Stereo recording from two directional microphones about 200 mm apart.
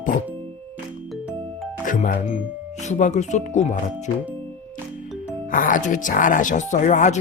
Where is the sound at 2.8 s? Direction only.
35° left (ahead or behind).